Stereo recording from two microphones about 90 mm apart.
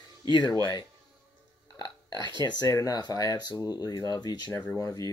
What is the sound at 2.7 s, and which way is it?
Speech, 45° left (ahead or behind).